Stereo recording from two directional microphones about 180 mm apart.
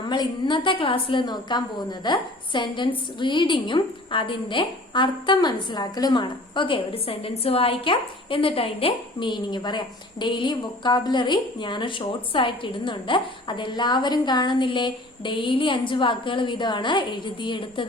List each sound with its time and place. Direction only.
0.0 s a woman's voice: 25° left (ahead or behind)